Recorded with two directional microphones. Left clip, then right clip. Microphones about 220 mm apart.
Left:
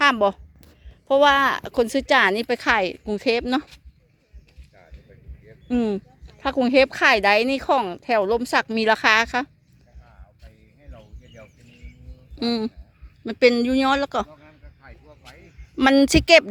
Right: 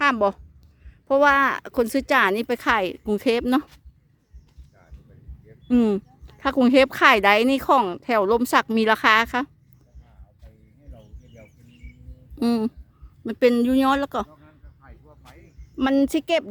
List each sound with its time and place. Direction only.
0.0 s a woman's voice: 5° right (ahead or behind)
5.6 s speech: 25° right (ahead or behind)
12.4 s speech: 15° right (ahead or behind)
14.4 s a sound: 45° left (ahead or behind)
15.7 s speech: centre (ahead or behind)